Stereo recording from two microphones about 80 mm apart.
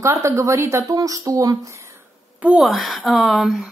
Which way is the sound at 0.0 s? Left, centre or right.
Right.